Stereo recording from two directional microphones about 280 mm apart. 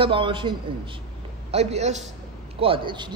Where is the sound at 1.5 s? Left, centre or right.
Right.